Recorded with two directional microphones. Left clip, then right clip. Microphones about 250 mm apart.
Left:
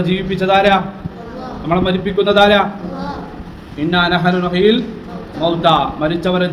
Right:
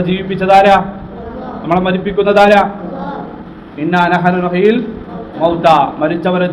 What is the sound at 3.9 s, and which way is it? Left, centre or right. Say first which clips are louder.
A man's voice: right 3 dB; centre.